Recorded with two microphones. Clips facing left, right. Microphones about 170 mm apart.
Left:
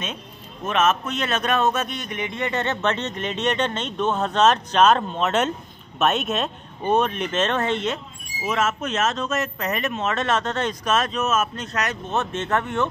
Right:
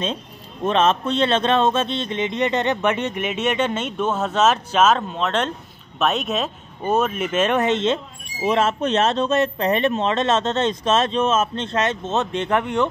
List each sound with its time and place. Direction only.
0.7 s a man's voice: 30° right (ahead or behind); by 12.8 s 15° right (ahead or behind)